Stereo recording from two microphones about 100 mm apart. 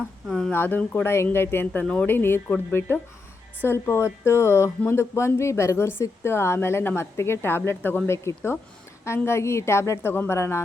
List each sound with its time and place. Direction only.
0.3 s speech: 5° left (ahead or behind)
0.5 s speech: 20° left (ahead or behind)
1.8 s speech: 10° left (ahead or behind); by 10.6 s 25° left (ahead or behind)